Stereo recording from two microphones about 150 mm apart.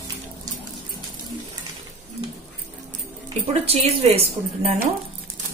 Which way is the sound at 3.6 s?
40° right (ahead or behind).